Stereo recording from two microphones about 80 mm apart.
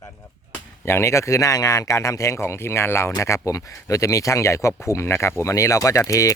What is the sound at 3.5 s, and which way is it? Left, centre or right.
Speech, left.